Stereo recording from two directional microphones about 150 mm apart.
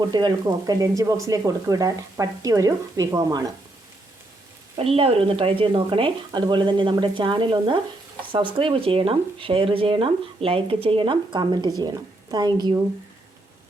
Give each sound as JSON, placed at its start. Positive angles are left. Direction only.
{"t": 0.1, "sound": "speech", "side_deg": -30}
{"t": 4.8, "sound": "speech", "side_deg": -40}